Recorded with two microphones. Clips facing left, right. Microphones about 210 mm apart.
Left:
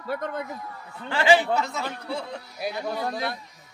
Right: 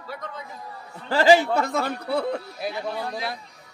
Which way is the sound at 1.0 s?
40° right (ahead or behind).